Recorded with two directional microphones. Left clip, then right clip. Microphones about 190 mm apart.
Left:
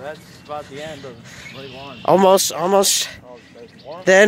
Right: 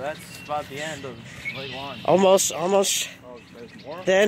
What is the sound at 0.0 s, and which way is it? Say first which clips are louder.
Speech: right 1 dB; 50° right (ahead or behind).